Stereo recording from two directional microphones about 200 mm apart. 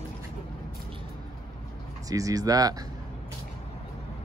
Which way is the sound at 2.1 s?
15° right (ahead or behind).